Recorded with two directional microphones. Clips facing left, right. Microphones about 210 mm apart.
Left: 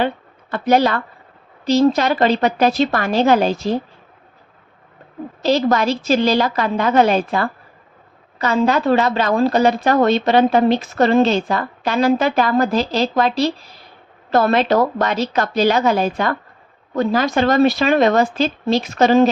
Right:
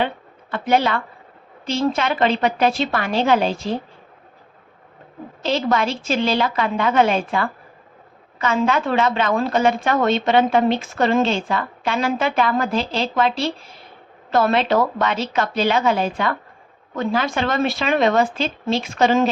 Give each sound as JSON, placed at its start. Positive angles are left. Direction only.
{"t": 0.5, "sound": "speech", "side_deg": 40}
{"t": 5.4, "sound": "speech", "side_deg": 40}